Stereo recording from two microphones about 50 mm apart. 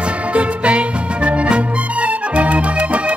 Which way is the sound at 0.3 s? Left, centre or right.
Right.